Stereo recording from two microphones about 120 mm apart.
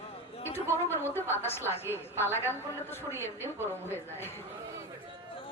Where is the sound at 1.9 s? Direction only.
20° right (ahead or behind).